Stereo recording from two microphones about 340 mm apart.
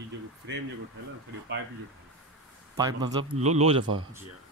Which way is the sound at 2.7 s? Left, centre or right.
Centre.